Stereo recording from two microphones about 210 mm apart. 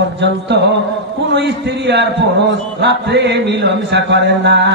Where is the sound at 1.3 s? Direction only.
55° right (ahead or behind).